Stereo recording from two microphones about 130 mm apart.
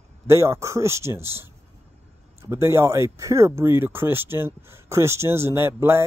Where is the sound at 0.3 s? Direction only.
20° right (ahead or behind).